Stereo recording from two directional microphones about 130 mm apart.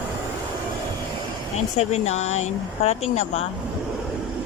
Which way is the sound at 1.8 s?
60° left (ahead or behind).